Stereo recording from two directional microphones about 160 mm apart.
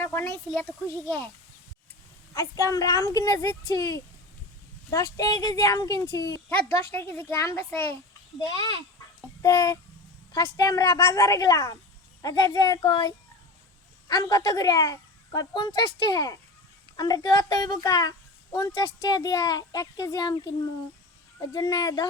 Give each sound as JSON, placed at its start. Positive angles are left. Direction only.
{"t": 0.0, "sound": "speech", "side_deg": 15}
{"t": 2.3, "sound": "speech", "side_deg": 20}
{"t": 21.5, "sound": "speech", "side_deg": 25}